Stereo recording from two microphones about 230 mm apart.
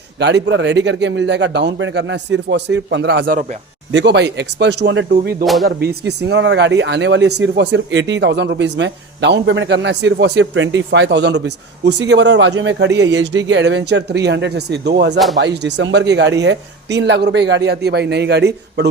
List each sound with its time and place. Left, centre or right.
0.2 s speech: right